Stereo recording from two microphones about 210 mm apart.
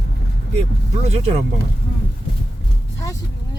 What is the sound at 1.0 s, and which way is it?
Speech, 30° right (ahead or behind).